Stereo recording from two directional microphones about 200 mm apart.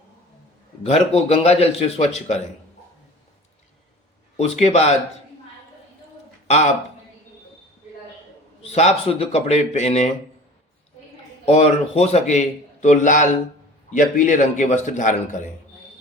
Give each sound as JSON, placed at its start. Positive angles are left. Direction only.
{"t": 0.9, "sound": "a man's voice", "side_deg": 30}
{"t": 4.4, "sound": "a man's voice", "side_deg": 35}
{"t": 8.6, "sound": "a man's voice", "side_deg": 35}
{"t": 11.4, "sound": "a man's voice", "side_deg": 30}